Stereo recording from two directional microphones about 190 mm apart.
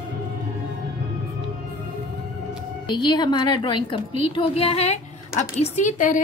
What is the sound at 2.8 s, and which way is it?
A woman's voice, 25° left (ahead or behind).